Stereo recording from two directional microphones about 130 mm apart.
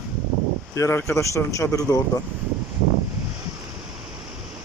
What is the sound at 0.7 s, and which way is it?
Speech, 20° left (ahead or behind).